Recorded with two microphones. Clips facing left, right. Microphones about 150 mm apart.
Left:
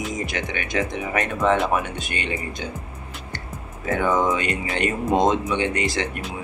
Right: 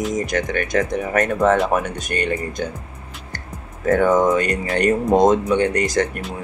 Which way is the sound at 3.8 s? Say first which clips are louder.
Right 6 dB; 45° right (ahead or behind).